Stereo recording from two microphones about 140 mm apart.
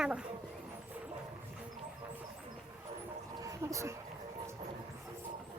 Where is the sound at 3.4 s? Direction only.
25° right (ahead or behind).